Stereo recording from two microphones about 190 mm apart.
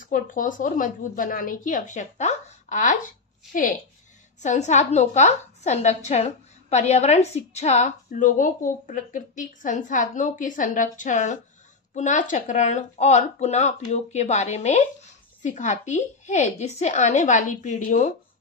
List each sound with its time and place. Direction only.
0.0 s a woman's voice: 45° left (ahead or behind)
4.4 s a woman's voice: 40° left (ahead or behind)